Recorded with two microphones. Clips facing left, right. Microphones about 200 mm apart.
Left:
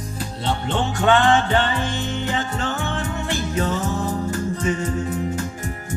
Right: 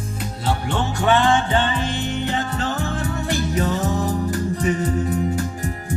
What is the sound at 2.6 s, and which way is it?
Music, 35° right (ahead or behind).